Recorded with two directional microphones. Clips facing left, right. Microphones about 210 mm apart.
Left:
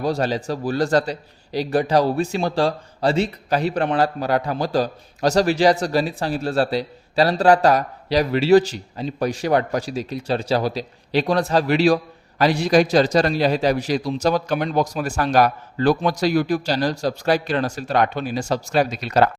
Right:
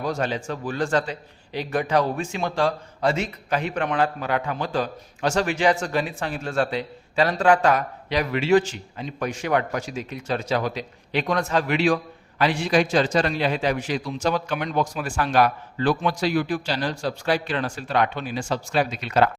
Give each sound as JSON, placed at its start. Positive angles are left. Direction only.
{"t": 0.0, "sound": "a man's voice", "side_deg": 35}